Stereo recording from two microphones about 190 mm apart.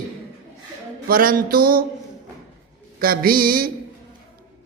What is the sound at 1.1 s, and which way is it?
Speech, 50° right (ahead or behind).